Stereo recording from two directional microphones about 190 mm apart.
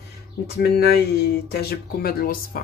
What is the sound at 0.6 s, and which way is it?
Speech, 55° left (ahead or behind).